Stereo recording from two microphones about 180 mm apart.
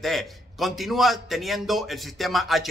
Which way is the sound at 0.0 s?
Centre (ahead or behind).